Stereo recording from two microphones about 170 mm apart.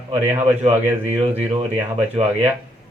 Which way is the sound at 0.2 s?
10° right (ahead or behind).